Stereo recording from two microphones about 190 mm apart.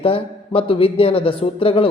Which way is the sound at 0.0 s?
30° left (ahead or behind).